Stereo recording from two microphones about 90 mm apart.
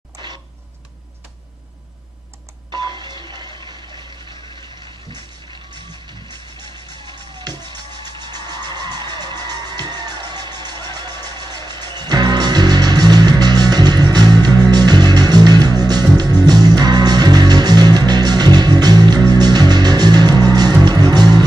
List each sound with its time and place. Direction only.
2.7 s printer: 55° right (ahead or behind)
5.1 s music: 60° right (ahead or behind)
7.4 s music: 50° right (ahead or behind)